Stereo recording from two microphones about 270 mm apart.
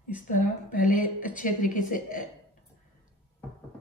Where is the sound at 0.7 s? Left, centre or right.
Left.